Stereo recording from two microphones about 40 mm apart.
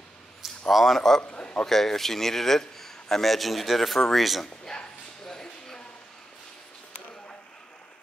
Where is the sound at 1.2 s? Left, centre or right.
Left.